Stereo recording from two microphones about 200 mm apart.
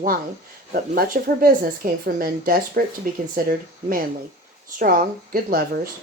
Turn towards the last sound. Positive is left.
turn(degrees=-45)  # may be behind; listen again after turning